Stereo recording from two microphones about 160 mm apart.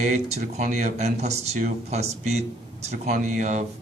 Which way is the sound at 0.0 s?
50° right (ahead or behind).